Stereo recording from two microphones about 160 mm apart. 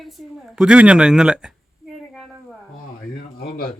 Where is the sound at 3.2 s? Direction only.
65° left (ahead or behind).